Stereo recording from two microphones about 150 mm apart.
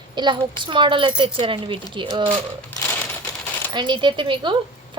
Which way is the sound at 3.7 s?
30° right (ahead or behind).